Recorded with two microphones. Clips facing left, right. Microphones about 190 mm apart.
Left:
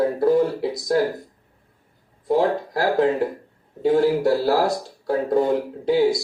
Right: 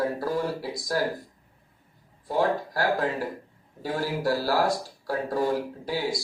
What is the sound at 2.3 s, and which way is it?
Speech, 25° left (ahead or behind).